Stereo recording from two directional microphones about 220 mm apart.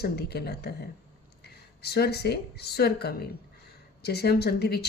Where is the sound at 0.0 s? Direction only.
45° left (ahead or behind).